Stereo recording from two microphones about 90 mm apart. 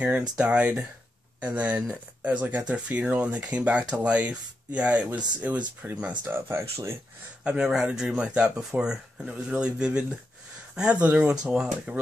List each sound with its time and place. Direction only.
0.4 s speech: 15° right (ahead or behind)
7.4 s speech: 5° right (ahead or behind)